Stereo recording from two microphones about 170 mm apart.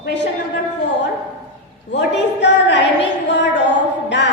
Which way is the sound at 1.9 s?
90° left.